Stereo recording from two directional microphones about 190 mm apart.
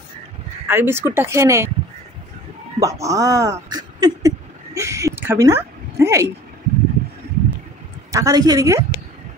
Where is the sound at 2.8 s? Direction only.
15° right (ahead or behind).